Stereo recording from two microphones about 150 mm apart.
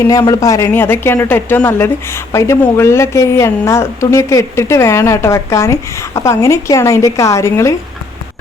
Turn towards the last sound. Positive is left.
turn(degrees=20)  # may be behind; listen again after turning